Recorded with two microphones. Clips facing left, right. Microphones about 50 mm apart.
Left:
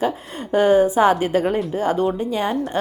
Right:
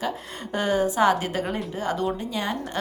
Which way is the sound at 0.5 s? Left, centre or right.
Left.